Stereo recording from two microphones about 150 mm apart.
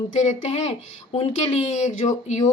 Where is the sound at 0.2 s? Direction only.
50° left (ahead or behind).